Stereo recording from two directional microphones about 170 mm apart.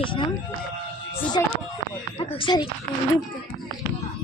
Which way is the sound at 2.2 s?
30° left (ahead or behind).